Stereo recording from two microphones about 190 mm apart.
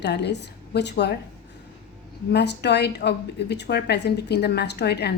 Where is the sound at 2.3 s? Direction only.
65° left (ahead or behind).